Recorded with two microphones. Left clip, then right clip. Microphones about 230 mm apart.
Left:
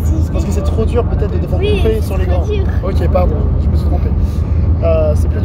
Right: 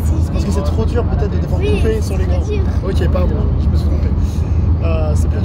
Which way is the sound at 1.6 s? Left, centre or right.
Centre.